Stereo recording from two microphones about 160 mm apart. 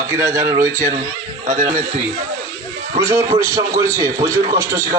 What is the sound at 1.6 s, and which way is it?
Speech, 35° right (ahead or behind).